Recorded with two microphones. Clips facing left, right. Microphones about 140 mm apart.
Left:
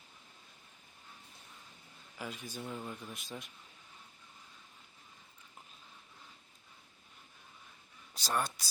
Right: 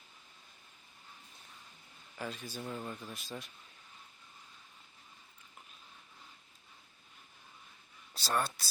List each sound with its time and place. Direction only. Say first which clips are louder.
2.1 s a man's voice: right 2 dB; 10° left (ahead or behind)
2.6 s speech: even; centre (ahead or behind)
3.1 s speech: right 1 dB; 15° left (ahead or behind)
8.1 s speech: right 1 dB; 15° left (ahead or behind)